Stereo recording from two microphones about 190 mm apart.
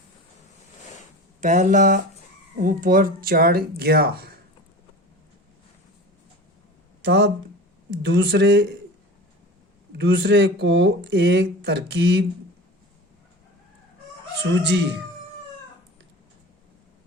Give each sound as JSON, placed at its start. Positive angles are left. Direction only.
{"t": 1.4, "sound": "speech", "side_deg": -40}
{"t": 7.0, "sound": "speech", "side_deg": -60}
{"t": 10.0, "sound": "speech", "side_deg": -70}
{"t": 14.5, "sound": "speech", "side_deg": -70}